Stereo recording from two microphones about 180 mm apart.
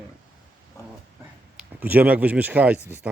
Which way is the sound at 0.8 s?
15° left (ahead or behind).